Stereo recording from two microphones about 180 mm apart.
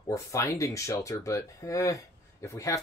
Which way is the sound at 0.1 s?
15° left (ahead or behind).